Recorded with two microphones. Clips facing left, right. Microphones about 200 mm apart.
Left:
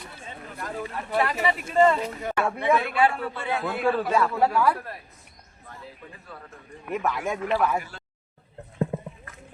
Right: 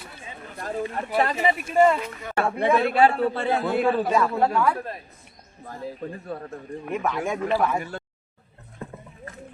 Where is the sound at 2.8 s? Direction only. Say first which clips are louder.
Right 5 dB; 40° right (ahead or behind).